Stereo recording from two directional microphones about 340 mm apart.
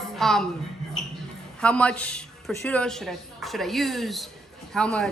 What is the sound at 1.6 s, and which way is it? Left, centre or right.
A woman's voice, centre.